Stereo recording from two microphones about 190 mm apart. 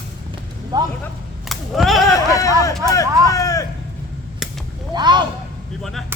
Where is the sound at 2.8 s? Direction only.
15° left (ahead or behind).